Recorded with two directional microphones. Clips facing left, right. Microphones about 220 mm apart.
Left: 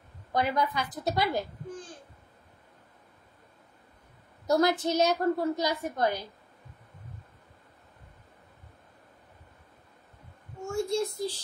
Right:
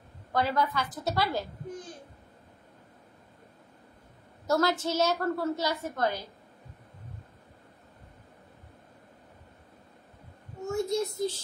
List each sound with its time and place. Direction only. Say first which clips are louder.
0.3 s a woman's voice: even; 15° left (ahead or behind)
4.5 s a woman's voice: left 2 dB; 15° left (ahead or behind)
10.7 s a sound: even; 20° right (ahead or behind)